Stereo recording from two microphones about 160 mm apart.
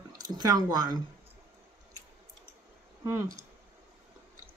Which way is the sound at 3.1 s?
15° right (ahead or behind).